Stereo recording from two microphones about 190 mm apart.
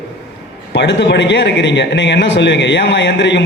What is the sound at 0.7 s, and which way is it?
A man's voice, 65° left (ahead or behind).